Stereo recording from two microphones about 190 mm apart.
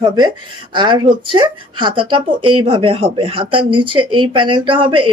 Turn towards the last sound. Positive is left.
turn(degrees=-25)  # may be behind; listen again after turning